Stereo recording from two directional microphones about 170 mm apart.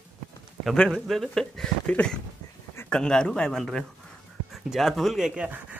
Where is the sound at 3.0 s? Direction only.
5° left (ahead or behind).